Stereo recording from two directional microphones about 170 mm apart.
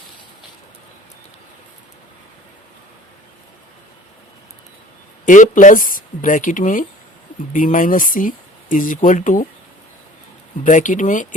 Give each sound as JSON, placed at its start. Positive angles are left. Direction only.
{"t": 5.2, "sound": "speech", "side_deg": 50}
{"t": 10.6, "sound": "speech", "side_deg": 50}